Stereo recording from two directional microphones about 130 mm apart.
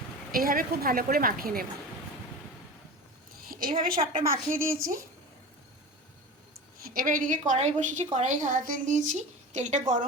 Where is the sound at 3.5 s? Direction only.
90° right.